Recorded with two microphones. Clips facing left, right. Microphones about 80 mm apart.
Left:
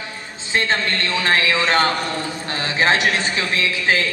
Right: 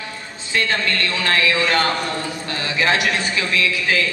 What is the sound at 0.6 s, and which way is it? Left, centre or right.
A man's voice, left.